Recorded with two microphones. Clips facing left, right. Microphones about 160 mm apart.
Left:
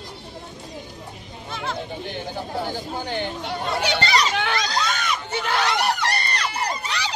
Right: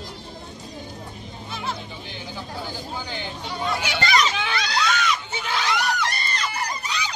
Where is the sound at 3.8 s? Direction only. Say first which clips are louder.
Left 1 dB; 30° left (ahead or behind).